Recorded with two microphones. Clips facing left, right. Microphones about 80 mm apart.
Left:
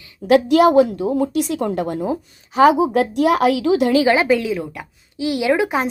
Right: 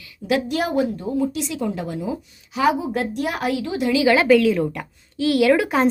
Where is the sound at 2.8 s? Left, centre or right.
Left.